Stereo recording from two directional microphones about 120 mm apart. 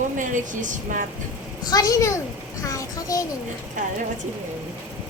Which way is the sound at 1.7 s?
30° left (ahead or behind).